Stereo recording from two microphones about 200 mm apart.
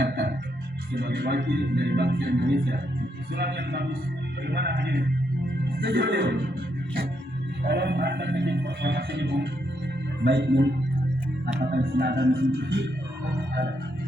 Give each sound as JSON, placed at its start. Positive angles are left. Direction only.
{"t": 0.0, "sound": "music", "side_deg": -50}
{"t": 0.9, "sound": "speech", "side_deg": -50}
{"t": 7.6, "sound": "speech", "side_deg": -55}